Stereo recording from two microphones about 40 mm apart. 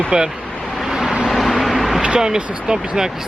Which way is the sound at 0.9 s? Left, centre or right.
Right.